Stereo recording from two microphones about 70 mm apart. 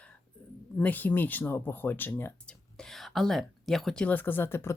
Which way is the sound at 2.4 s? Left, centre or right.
Centre.